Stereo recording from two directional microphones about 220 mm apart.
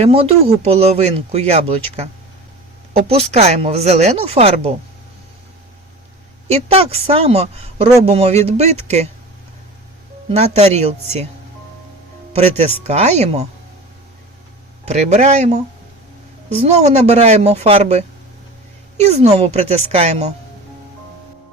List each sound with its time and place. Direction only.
0.0 s speech: 25° right (ahead or behind)
6.5 s speech: 25° right (ahead or behind)
10.2 s speech: 30° right (ahead or behind)
12.3 s speech: 30° right (ahead or behind)
14.8 s speech: 30° right (ahead or behind)
16.6 s speech: 30° right (ahead or behind)